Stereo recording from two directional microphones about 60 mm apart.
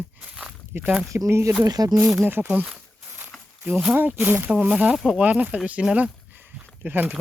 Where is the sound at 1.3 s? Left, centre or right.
Right.